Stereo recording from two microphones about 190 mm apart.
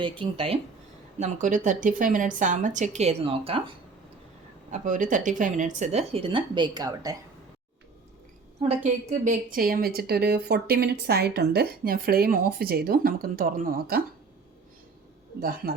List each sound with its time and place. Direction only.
0.0 s speech: 30° right (ahead or behind)
1.2 s speech: 40° right (ahead or behind)
4.7 s speech: 45° right (ahead or behind); by 7.2 s 20° right (ahead or behind)
8.6 s a woman's voice: 35° right (ahead or behind); by 14.0 s 50° right (ahead or behind)
15.4 s a woman's voice: 50° right (ahead or behind)